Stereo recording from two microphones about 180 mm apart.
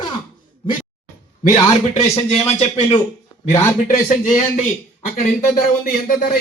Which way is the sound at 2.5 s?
35° left (ahead or behind).